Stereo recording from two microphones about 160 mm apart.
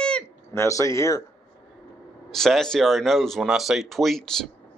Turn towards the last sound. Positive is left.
turn(degrees=0)  # may be behind; listen again after turning